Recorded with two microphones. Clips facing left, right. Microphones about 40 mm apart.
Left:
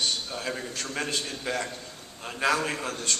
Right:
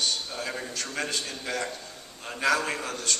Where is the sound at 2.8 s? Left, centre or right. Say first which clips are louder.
Even; left.